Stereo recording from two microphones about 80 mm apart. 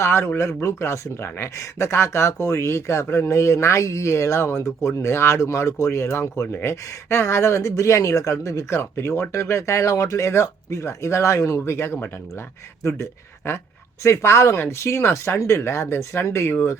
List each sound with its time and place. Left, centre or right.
0.0 s speech: left